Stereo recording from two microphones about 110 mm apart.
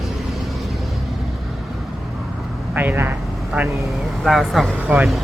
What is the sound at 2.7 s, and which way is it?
Vehicle, 15° right (ahead or behind).